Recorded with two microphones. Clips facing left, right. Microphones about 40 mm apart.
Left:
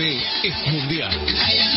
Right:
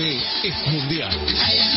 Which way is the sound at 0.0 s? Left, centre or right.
Centre.